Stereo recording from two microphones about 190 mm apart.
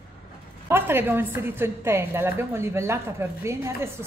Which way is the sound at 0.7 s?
10° right (ahead or behind).